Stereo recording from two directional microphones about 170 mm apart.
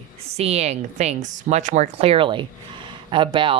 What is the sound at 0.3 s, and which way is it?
Speech, 40° right (ahead or behind).